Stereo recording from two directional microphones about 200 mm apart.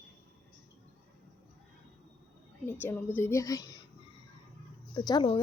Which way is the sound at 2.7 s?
10° left (ahead or behind).